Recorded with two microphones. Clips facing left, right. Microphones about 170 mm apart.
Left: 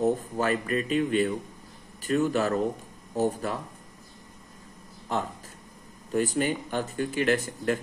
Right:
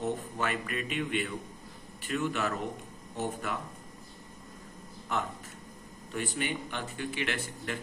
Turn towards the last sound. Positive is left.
turn(degrees=40)  # may be behind; listen again after turning